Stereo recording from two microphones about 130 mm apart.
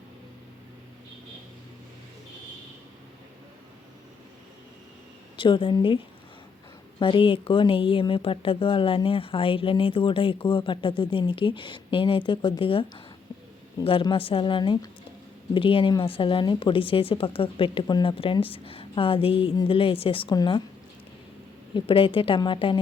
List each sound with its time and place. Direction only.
5.4 s speech: 40° left (ahead or behind)
7.0 s speech: 40° left (ahead or behind)
13.8 s a woman's voice: 45° left (ahead or behind)
20.3 s speech: 35° left (ahead or behind)
21.8 s a woman's voice: 45° left (ahead or behind)